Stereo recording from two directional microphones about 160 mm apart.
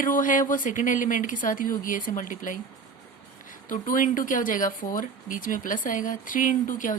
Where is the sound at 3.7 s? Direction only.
55° left (ahead or behind).